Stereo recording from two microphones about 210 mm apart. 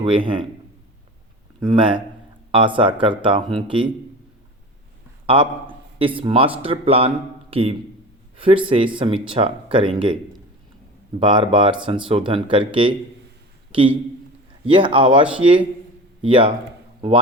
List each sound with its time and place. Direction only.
0.0 s speech: 25° right (ahead or behind)
1.7 s speech: 25° right (ahead or behind)
5.2 s a man's voice: 25° right (ahead or behind)
11.2 s speech: 25° right (ahead or behind)
14.6 s speech: 25° right (ahead or behind)